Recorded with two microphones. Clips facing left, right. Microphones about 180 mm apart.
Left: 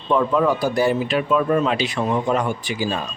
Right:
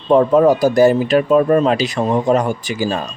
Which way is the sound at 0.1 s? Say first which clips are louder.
Right 7 dB; 40° right (ahead or behind).